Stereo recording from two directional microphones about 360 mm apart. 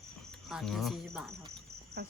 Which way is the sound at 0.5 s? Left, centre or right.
Centre.